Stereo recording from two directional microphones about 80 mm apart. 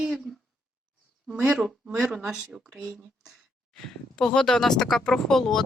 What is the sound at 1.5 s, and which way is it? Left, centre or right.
Speech, centre.